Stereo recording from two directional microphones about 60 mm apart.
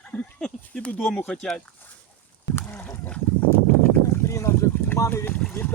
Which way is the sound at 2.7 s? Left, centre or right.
Left.